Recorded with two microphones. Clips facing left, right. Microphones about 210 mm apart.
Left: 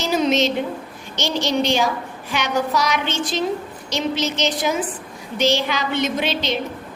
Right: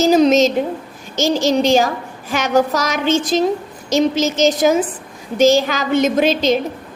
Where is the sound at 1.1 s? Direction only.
45° right (ahead or behind).